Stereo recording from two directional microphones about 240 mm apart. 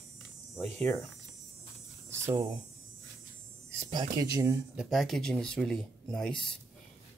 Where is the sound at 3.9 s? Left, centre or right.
Centre.